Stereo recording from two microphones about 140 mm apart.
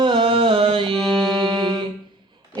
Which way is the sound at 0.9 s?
5° left (ahead or behind).